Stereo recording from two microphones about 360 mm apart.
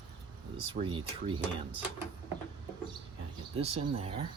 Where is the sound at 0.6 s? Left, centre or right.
Centre.